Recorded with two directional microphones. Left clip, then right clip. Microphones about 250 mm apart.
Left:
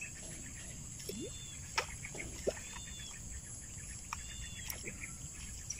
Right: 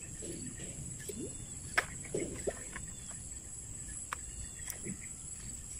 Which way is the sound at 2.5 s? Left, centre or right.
Centre.